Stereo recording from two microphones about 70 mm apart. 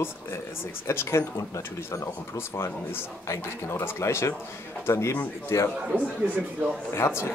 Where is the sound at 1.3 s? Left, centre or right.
Left.